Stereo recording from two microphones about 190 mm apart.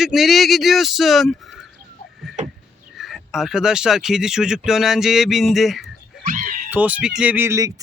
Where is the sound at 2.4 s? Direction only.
40° right (ahead or behind).